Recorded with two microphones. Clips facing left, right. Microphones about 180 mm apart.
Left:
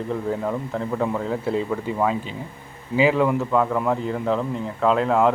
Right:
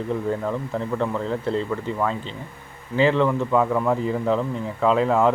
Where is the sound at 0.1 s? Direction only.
5° left (ahead or behind).